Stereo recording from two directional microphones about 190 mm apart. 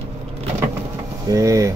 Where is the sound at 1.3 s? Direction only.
15° right (ahead or behind).